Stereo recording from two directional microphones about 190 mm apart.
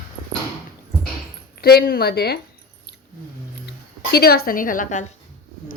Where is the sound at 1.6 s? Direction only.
55° left (ahead or behind).